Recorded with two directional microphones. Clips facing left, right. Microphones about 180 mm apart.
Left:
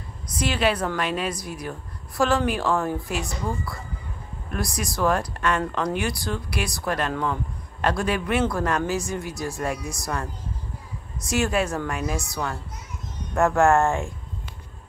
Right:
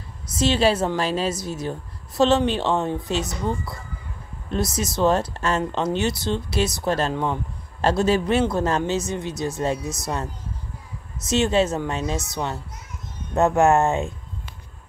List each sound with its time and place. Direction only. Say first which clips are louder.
0.4 s a woman's voice: right 4 dB; 25° right (ahead or behind)
13.3 s a woman's voice: right 1 dB; 20° right (ahead or behind)